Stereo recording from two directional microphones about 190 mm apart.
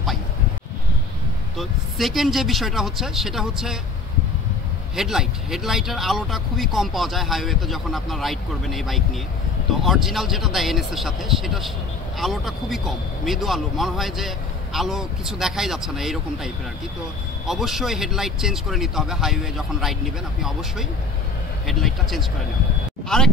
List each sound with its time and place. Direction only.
1.6 s speech: centre (ahead or behind)
4.9 s speech: centre (ahead or behind)
21.6 s speech: centre (ahead or behind)